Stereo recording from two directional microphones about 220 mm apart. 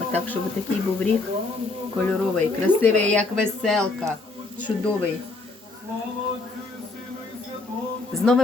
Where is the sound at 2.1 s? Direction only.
5° left (ahead or behind).